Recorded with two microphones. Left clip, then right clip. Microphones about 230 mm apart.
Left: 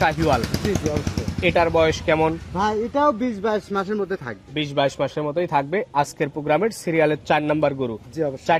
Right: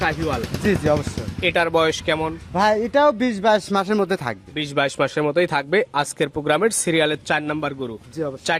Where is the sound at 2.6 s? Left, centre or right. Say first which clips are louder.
Right 5 dB; right.